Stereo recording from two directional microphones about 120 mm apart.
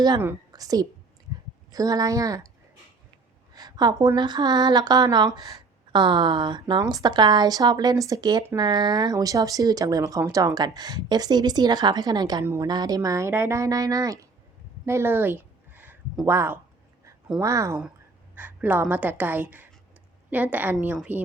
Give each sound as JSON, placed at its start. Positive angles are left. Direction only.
{"t": 0.5, "sound": "a woman's voice", "side_deg": -30}
{"t": 1.3, "sound": "a sound", "side_deg": -35}
{"t": 1.7, "sound": "speech", "side_deg": -30}
{"t": 3.5, "sound": "a woman's voice", "side_deg": -35}
{"t": 14.8, "sound": "a sound", "side_deg": -20}
{"t": 16.2, "sound": "speech", "side_deg": -20}
{"t": 18.3, "sound": "a woman's voice", "side_deg": -15}